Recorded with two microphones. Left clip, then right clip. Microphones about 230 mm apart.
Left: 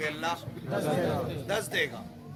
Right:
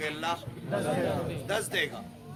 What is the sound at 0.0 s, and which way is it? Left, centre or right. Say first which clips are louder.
Speech: even; centre.